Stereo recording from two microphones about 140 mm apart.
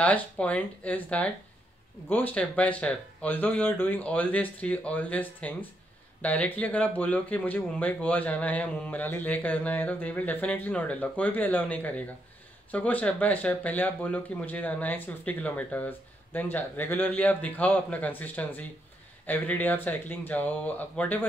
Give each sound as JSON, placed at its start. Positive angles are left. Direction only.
{"t": 0.0, "sound": "speech", "side_deg": 10}